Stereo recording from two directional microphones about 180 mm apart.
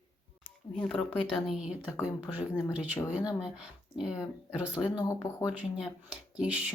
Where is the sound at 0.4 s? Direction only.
5° left (ahead or behind).